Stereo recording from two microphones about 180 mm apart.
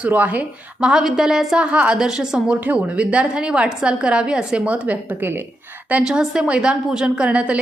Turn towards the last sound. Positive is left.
turn(degrees=-5)  # may be behind; listen again after turning